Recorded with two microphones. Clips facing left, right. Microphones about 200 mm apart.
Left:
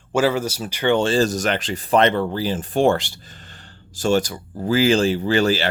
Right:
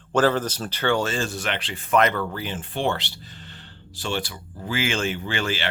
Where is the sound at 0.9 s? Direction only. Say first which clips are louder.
Left 7 dB; 30° left (ahead or behind).